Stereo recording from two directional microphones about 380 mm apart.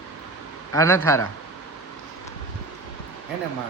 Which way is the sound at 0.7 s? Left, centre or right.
Centre.